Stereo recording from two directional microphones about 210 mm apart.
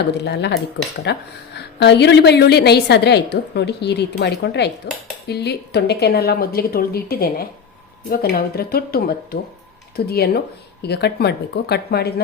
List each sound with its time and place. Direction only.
0.3 s a woman's voice: 55° left (ahead or behind)